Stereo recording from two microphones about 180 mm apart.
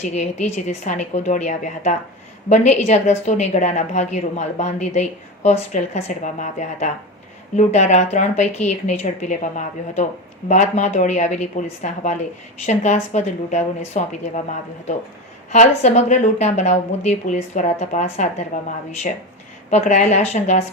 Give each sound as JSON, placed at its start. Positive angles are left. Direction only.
{"t": 0.0, "sound": "a woman's voice", "side_deg": 40}
{"t": 15.4, "sound": "a woman's voice", "side_deg": 40}
{"t": 19.7, "sound": "a woman's voice", "side_deg": 40}